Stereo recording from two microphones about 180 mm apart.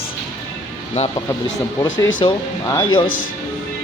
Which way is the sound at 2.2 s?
30° left (ahead or behind).